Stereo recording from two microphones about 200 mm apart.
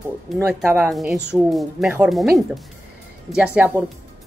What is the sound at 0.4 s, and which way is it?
A woman's voice, 10° right (ahead or behind).